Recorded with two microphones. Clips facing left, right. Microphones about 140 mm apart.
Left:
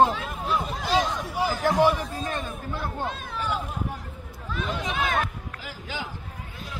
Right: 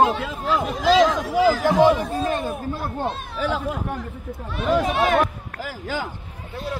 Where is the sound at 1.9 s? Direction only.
70° right (ahead or behind).